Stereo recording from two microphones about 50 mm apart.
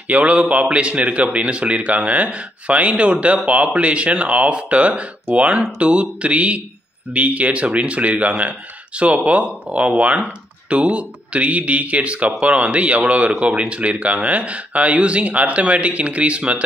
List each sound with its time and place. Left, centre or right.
0.1 s speech: right